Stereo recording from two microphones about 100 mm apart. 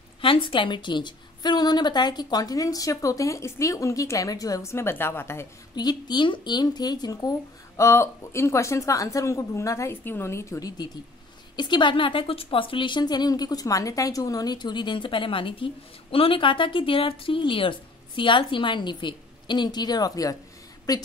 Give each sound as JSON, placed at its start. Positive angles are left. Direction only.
{"t": 0.2, "sound": "a woman's voice", "side_deg": 60}
{"t": 5.8, "sound": "a woman's voice", "side_deg": 45}
{"t": 11.5, "sound": "a woman's voice", "side_deg": 50}